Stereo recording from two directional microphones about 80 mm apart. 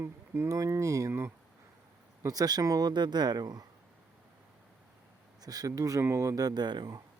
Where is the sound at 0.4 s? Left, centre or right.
Right.